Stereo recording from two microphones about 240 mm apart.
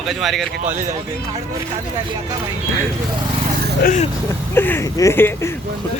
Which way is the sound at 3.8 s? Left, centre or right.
Left.